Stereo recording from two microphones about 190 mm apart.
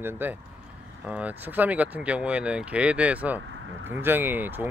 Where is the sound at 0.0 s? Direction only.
10° right (ahead or behind).